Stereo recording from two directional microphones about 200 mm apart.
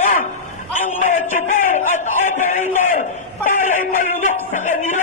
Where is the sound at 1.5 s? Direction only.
40° left (ahead or behind).